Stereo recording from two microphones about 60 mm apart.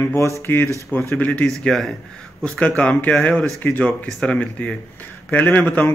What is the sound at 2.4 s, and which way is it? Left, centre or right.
Speech, left.